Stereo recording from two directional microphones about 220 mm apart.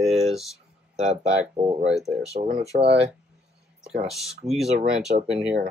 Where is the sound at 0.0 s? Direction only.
Centre (ahead or behind).